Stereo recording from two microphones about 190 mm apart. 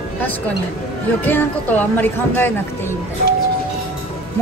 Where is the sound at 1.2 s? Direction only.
10° left (ahead or behind).